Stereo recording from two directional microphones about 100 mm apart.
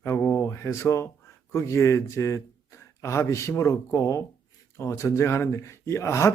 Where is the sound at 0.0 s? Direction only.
20° left (ahead or behind).